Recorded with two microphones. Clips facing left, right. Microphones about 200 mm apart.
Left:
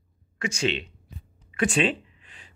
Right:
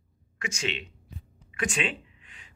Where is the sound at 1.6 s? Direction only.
35° left (ahead or behind).